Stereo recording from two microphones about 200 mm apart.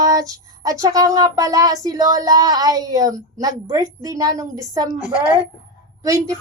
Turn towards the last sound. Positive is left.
turn(degrees=-15)  # may be behind; listen again after turning